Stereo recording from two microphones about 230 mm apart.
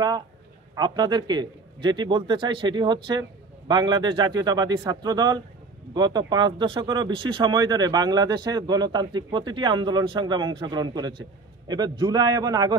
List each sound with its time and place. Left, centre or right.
0.7 s speech: centre